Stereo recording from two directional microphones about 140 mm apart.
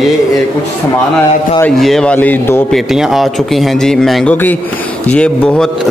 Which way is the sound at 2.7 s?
Centre (ahead or behind).